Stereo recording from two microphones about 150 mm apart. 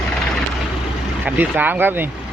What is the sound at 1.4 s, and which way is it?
Speech, 10° right (ahead or behind).